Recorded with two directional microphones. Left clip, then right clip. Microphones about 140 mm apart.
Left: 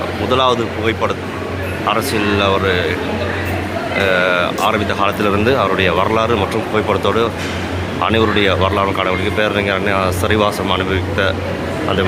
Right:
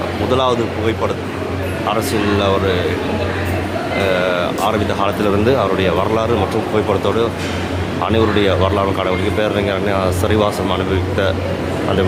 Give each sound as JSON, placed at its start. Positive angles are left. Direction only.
{"t": 0.3, "sound": "speech", "side_deg": -15}
{"t": 2.2, "sound": "speech", "side_deg": -25}
{"t": 4.2, "sound": "speech", "side_deg": -20}
{"t": 9.4, "sound": "speech", "side_deg": -20}